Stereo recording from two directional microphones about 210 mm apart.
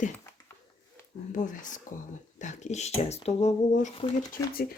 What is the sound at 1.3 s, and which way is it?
Speech, 40° left (ahead or behind).